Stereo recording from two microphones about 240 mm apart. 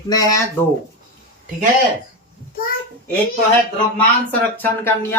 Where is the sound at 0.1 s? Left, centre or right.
Centre.